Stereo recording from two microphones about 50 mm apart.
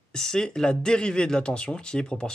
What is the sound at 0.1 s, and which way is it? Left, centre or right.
Speech, centre.